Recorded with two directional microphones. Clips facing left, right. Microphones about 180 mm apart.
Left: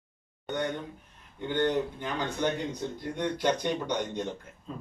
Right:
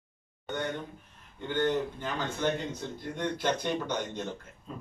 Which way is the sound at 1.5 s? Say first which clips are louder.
Left 1 dB; 15° left (ahead or behind).